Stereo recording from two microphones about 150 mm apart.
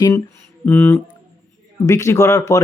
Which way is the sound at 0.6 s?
15° left (ahead or behind).